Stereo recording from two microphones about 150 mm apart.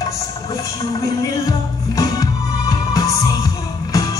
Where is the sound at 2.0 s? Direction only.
25° left (ahead or behind).